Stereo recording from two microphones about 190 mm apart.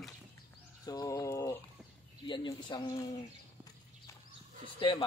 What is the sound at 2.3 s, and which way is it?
Speech, 25° left (ahead or behind).